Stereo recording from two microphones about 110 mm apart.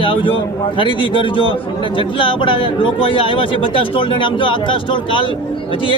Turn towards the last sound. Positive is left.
turn(degrees=50)  # may be behind; listen again after turning